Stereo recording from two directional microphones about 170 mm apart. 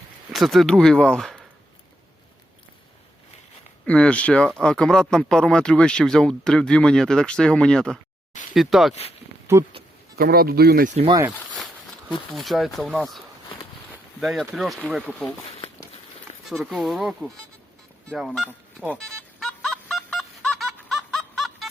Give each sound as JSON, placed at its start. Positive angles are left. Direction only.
{"t": 0.3, "sound": "speech", "side_deg": 0}
{"t": 3.8, "sound": "speech", "side_deg": 5}
{"t": 10.2, "sound": "speech", "side_deg": -60}
{"t": 11.2, "sound": "a sound", "side_deg": 0}
{"t": 12.3, "sound": "speech", "side_deg": 0}
{"t": 16.5, "sound": "speech", "side_deg": 0}
{"t": 19.0, "sound": "music", "side_deg": 5}